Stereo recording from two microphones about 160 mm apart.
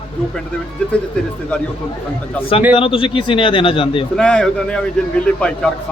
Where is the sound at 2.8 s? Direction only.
35° left (ahead or behind).